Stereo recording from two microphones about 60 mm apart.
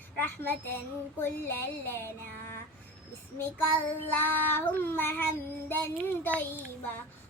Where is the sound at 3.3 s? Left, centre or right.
Left.